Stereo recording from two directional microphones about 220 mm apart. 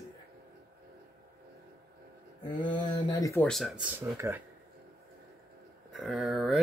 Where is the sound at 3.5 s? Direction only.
Centre (ahead or behind).